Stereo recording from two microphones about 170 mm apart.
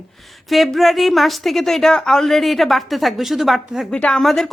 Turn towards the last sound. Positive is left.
turn(degrees=0)  # may be behind; listen again after turning